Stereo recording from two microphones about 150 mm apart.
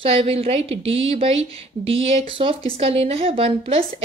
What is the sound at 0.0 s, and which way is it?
A woman's voice, 40° right (ahead or behind).